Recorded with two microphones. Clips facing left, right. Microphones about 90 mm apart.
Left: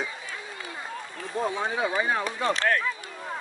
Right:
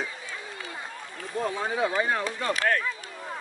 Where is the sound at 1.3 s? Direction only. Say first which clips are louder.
Left 1 dB; 20° left (ahead or behind).